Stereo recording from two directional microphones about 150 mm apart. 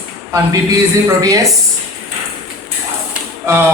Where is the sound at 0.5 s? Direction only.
25° right (ahead or behind).